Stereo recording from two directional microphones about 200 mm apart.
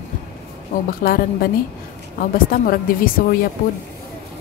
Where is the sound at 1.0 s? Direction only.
45° left (ahead or behind).